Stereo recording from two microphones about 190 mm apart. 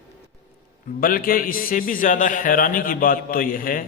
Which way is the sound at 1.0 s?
50° left (ahead or behind).